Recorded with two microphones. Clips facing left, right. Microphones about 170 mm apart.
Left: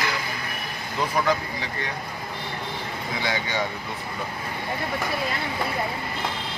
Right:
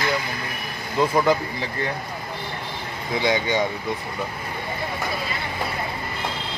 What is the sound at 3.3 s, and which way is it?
Speech, 20° right (ahead or behind).